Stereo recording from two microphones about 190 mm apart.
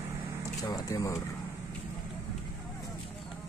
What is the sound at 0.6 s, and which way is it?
Speech, 20° left (ahead or behind).